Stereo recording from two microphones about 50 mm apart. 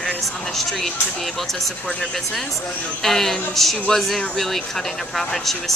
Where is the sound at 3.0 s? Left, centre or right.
Centre.